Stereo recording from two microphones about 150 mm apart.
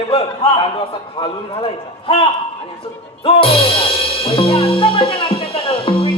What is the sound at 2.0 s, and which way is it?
Speech, 40° left (ahead or behind).